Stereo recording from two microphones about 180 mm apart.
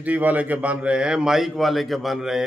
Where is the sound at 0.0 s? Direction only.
10° right (ahead or behind).